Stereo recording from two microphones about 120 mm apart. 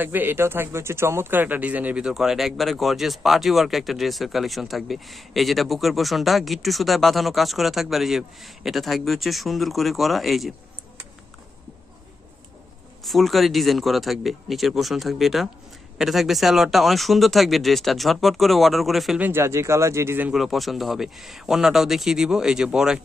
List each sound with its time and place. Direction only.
0.0 s speech: 15° right (ahead or behind); by 10.5 s centre (ahead or behind)
13.0 s speech: centre (ahead or behind)
19.1 s speech: 15° right (ahead or behind)
20.3 s speech: centre (ahead or behind)